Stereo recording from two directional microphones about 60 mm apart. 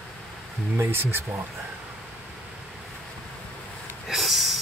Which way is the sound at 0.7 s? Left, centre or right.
Right.